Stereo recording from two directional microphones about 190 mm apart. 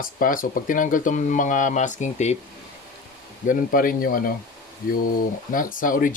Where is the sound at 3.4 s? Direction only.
50° left (ahead or behind).